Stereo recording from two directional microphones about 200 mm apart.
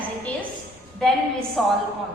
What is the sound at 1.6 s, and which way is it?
Speech, centre (ahead or behind).